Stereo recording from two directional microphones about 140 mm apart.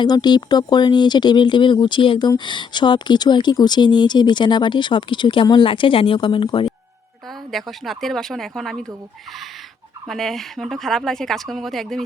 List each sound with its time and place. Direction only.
0.0 s speech: 30° left (ahead or behind)
7.5 s speech: centre (ahead or behind)
10.1 s speech: centre (ahead or behind)